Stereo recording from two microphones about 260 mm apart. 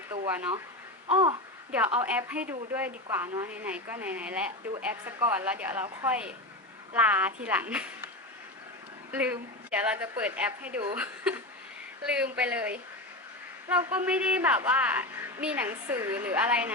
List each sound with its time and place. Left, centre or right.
0.1 s a sound: centre
1.0 s babbling: right
2.0 s a woman's voice: centre
9.1 s a woman's voice: centre